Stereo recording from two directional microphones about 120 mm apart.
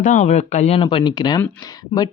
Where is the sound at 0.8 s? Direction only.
45° left (ahead or behind).